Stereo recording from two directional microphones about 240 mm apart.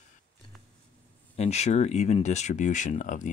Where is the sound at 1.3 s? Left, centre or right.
Left.